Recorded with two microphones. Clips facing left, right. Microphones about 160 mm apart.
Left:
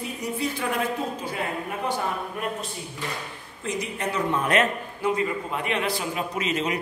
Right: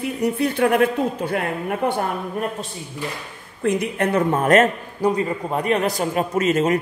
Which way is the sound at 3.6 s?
60° right (ahead or behind).